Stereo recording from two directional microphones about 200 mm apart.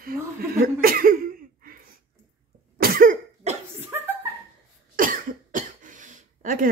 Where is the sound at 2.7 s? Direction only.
50° right (ahead or behind).